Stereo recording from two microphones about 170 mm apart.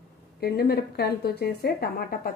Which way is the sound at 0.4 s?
65° left (ahead or behind).